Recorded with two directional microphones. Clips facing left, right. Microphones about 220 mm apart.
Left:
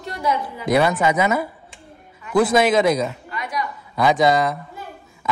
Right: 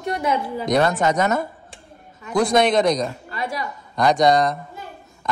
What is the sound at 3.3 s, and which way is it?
Speech, 30° right (ahead or behind).